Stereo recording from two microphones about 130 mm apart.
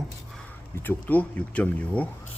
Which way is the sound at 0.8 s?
15° left (ahead or behind).